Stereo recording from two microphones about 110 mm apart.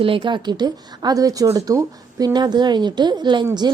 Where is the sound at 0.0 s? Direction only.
50° right (ahead or behind).